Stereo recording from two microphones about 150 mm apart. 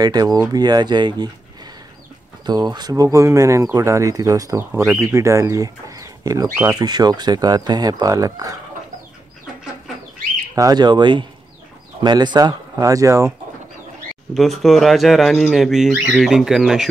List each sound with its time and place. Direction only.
0.0 s speech: 25° right (ahead or behind)
2.4 s speech: 30° right (ahead or behind)
6.8 s speech: 25° right (ahead or behind)
10.5 s speech: 25° right (ahead or behind)
14.3 s speech: centre (ahead or behind)